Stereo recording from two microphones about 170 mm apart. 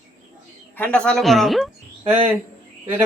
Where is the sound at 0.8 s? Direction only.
5° left (ahead or behind).